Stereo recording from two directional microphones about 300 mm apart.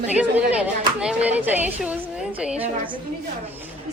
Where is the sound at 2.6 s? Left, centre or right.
Centre.